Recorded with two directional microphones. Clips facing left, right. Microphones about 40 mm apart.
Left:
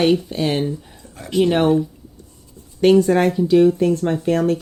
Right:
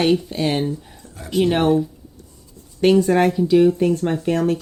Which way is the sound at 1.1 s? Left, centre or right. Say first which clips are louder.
Left 1 dB; centre.